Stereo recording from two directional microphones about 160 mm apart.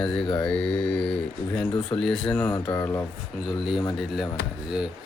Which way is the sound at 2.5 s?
25° left (ahead or behind).